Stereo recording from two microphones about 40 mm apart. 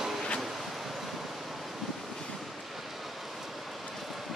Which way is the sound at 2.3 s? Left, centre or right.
Centre.